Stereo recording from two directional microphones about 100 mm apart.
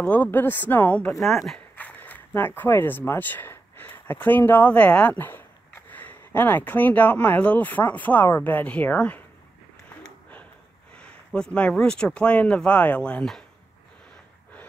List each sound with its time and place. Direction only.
0.0 s speech: 15° left (ahead or behind)
1.2 s speech: 5° left (ahead or behind)
1.8 s speech: 15° left (ahead or behind)
11.0 s speech: 10° left (ahead or behind)